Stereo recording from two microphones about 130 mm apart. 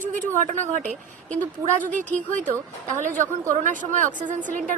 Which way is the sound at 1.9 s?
80° right.